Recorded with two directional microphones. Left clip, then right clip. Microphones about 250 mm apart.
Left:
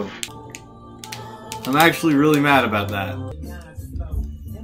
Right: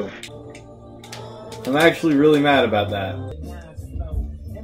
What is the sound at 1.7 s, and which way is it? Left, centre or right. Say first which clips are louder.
Speech: even; centre.